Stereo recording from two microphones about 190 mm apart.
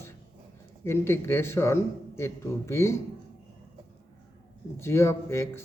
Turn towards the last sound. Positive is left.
turn(degrees=15)  # may be behind; listen again after turning